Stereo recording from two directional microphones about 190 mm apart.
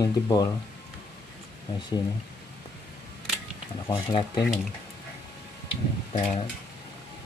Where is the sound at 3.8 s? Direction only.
25° left (ahead or behind).